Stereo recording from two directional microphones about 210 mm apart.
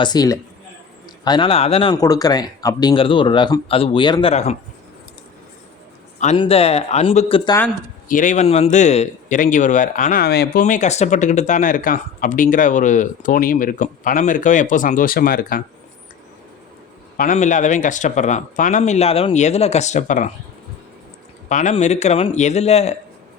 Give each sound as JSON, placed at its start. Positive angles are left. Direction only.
{"t": 0.0, "sound": "speech", "side_deg": 20}
{"t": 6.3, "sound": "speech", "side_deg": 25}
{"t": 8.0, "sound": "a man's voice", "side_deg": 40}
{"t": 17.2, "sound": "a man's voice", "side_deg": 35}
{"t": 21.5, "sound": "a man's voice", "side_deg": 35}